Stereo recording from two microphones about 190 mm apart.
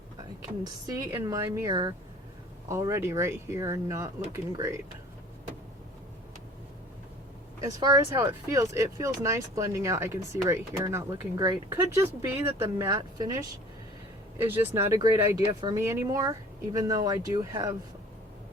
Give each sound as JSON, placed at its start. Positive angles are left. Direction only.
{"t": 0.6, "sound": "speech", "side_deg": -20}
{"t": 7.6, "sound": "speech", "side_deg": -20}